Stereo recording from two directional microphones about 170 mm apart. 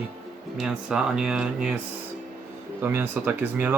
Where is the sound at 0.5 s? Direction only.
5° right (ahead or behind).